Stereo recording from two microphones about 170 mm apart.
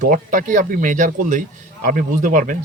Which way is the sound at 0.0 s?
50° right (ahead or behind).